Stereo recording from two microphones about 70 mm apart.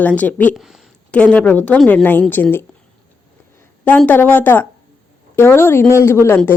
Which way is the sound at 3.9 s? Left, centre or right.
Left.